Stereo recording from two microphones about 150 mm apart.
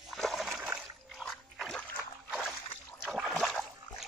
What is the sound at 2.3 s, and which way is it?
Boat, 5° right (ahead or behind).